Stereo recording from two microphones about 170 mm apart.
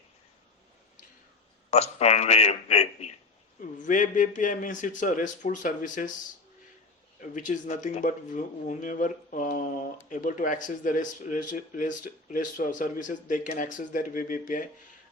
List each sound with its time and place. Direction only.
1.7 s speech: 40° left (ahead or behind)
3.8 s speech: 50° left (ahead or behind)
7.2 s speech: 50° left (ahead or behind)